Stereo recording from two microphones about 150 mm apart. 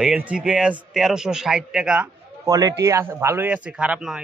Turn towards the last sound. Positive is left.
turn(degrees=-10)  # may be behind; listen again after turning